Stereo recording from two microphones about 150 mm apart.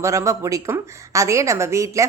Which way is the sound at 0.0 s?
20° right (ahead or behind).